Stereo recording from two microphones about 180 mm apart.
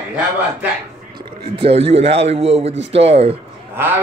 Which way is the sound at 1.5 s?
30° right (ahead or behind).